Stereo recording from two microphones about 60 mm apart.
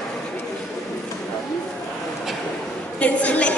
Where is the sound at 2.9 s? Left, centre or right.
Left.